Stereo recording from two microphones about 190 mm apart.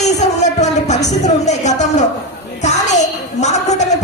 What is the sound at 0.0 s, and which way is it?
Music, 35° left (ahead or behind).